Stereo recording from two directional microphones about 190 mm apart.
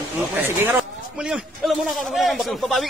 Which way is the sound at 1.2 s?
Centre (ahead or behind).